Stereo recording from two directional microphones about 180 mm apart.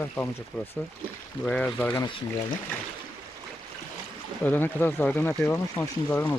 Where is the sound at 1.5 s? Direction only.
5° left (ahead or behind).